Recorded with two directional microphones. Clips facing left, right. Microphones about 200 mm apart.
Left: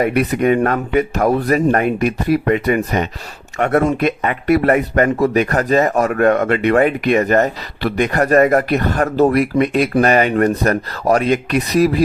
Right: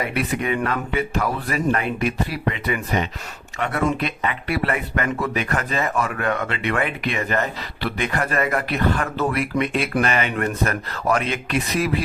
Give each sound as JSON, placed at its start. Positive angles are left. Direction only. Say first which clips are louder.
{"t": 0.0, "sound": "speech", "louder": "left 9 dB", "side_deg": 45}